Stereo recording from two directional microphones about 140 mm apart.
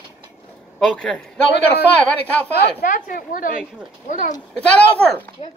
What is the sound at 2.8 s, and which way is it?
Speech, 70° left (ahead or behind).